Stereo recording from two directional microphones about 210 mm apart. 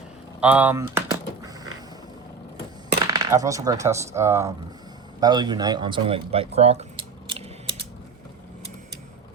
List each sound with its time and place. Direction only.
0.3 s speech: 5° right (ahead or behind)
3.1 s speech: 15° right (ahead or behind)